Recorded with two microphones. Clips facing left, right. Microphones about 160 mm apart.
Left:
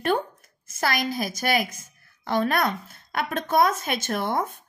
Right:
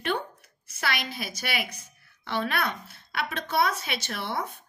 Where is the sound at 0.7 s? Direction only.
40° left (ahead or behind).